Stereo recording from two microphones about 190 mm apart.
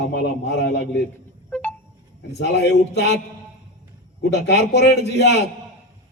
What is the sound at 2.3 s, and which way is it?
Speech, 65° left (ahead or behind).